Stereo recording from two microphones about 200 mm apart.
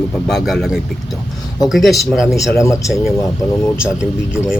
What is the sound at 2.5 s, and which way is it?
Speech, 15° left (ahead or behind).